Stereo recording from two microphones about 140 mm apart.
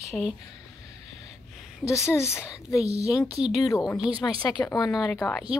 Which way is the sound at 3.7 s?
25° left (ahead or behind).